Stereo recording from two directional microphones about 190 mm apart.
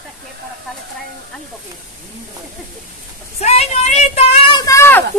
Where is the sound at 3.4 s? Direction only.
35° left (ahead or behind); by 5.0 s 15° left (ahead or behind).